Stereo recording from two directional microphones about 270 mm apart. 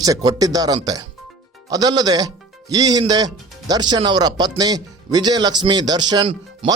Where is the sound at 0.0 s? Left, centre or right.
Centre.